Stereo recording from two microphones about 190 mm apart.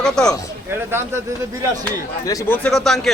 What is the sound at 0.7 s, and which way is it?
Speech, 10° right (ahead or behind).